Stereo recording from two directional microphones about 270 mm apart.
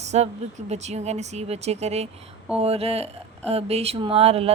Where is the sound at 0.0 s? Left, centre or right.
Right.